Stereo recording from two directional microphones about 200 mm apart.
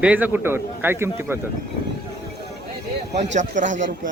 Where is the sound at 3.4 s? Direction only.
40° right (ahead or behind).